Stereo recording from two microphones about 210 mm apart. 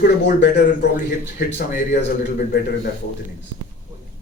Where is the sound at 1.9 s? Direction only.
45° left (ahead or behind).